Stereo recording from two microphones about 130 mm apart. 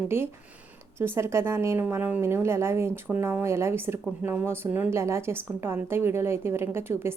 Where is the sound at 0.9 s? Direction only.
20° right (ahead or behind).